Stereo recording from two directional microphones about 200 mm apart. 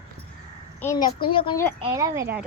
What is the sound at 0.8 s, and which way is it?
Speech, 15° left (ahead or behind).